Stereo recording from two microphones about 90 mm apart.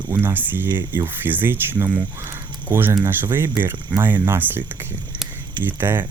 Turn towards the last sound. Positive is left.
turn(degrees=-25)  # may be behind; listen again after turning